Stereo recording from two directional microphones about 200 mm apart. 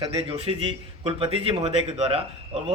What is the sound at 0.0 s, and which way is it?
A man's voice, 25° right (ahead or behind).